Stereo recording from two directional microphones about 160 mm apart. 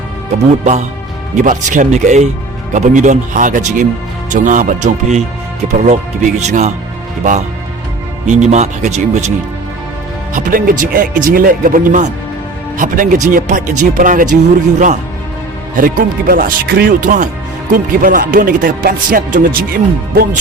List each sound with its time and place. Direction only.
0.6 s speech: 45° right (ahead or behind)
8.3 s speech: 45° right (ahead or behind)
10.3 s music: 60° right (ahead or behind)
13.2 s speech: 50° right (ahead or behind)
15.7 s music: 60° right (ahead or behind)